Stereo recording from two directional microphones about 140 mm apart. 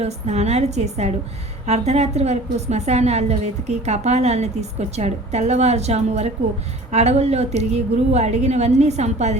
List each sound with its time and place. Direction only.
0.0 s a woman's voice: 50° right (ahead or behind)